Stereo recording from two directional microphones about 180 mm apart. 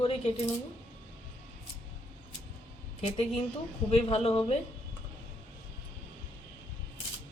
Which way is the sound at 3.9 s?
35° left (ahead or behind).